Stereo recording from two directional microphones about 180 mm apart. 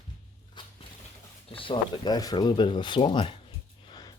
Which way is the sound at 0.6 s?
25° left (ahead or behind).